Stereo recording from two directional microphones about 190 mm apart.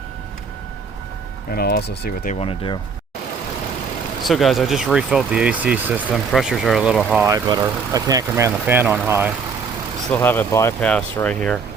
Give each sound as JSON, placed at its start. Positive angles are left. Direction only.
{"t": 1.5, "sound": "speech", "side_deg": 55}
{"t": 2.3, "sound": "speech", "side_deg": 30}
{"t": 4.2, "sound": "speech", "side_deg": 0}
{"t": 7.3, "sound": "speech", "side_deg": -20}
{"t": 10.1, "sound": "speech", "side_deg": 10}